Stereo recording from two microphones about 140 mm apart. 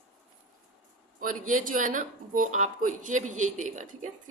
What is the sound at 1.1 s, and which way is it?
Speech, 70° right (ahead or behind).